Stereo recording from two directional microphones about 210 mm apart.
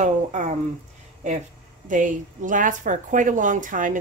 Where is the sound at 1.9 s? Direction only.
40° right (ahead or behind).